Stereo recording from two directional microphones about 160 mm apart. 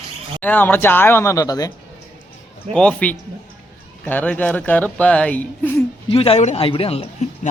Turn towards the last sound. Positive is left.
turn(degrees=40)  # may be behind; listen again after turning